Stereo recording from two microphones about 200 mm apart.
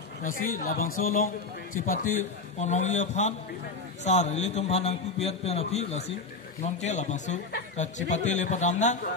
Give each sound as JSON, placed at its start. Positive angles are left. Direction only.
{"t": 0.2, "sound": "a man's voice", "side_deg": 45}